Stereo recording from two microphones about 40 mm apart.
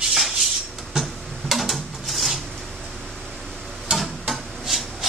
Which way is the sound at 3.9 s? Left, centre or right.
Centre.